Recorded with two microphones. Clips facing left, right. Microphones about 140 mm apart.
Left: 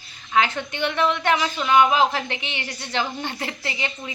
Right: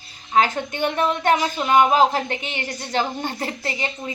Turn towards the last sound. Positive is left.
turn(degrees=-40)  # may be behind; listen again after turning